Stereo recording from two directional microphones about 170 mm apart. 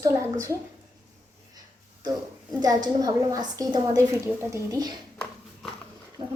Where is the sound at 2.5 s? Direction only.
25° right (ahead or behind).